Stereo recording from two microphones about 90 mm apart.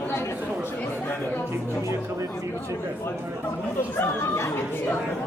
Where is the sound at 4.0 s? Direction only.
30° left (ahead or behind).